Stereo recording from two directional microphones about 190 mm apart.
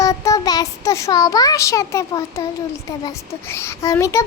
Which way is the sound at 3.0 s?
15° left (ahead or behind).